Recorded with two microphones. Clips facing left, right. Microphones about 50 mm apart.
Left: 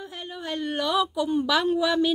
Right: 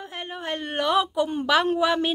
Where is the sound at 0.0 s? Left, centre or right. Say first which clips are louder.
Right 2 dB; right.